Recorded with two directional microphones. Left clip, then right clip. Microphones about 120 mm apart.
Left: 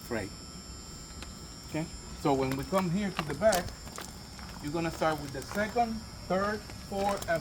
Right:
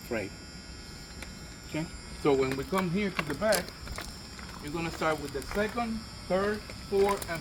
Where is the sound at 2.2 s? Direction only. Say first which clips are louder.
Right 3 dB; 40° left (ahead or behind).